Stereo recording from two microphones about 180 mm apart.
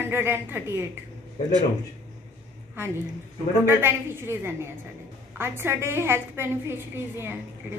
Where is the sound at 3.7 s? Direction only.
10° right (ahead or behind).